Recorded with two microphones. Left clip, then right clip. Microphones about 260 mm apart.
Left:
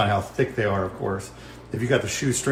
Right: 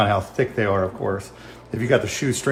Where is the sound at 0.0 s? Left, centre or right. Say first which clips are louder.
Right 3 dB; right.